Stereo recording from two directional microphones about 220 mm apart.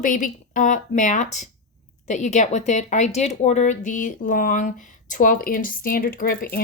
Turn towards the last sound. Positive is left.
turn(degrees=40)  # may be behind; listen again after turning